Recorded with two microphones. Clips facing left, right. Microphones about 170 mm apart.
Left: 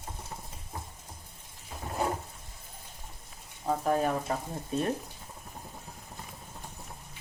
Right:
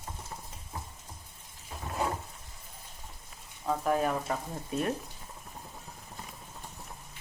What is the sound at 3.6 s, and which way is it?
Speech, 30° left (ahead or behind).